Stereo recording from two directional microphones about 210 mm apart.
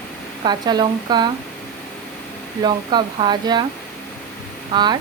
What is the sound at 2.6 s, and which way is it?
Speech, 20° right (ahead or behind).